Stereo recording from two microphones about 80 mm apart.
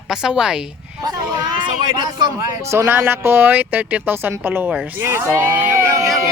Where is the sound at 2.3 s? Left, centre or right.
Right.